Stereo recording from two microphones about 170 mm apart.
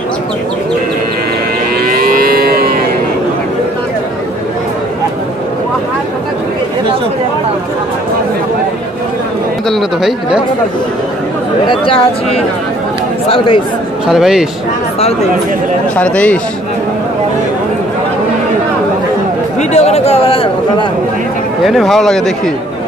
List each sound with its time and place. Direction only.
1.9 s livestock: 60° right (ahead or behind)
9.7 s speech: centre (ahead or behind)
11.6 s speech: 30° left (ahead or behind)
14.0 s speech: centre (ahead or behind)
16.0 s a man's voice: 10° left (ahead or behind)
19.7 s speech: 40° left (ahead or behind)
21.6 s speech: centre (ahead or behind)